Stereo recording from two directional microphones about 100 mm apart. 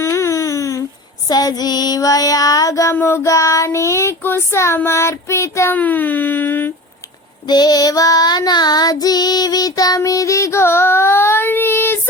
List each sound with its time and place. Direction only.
0.0 s a sound: 30° left (ahead or behind)
1.3 s child singing: 40° left (ahead or behind)
2.9 s music: 20° left (ahead or behind)
3.2 s child singing: 30° left (ahead or behind)
5.7 s a sound: 15° left (ahead or behind)
7.4 s child singing: 45° left (ahead or behind); by 11.9 s 25° left (ahead or behind)